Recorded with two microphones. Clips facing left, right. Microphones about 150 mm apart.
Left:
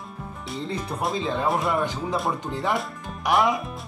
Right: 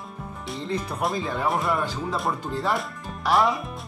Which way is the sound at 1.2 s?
20° left (ahead or behind).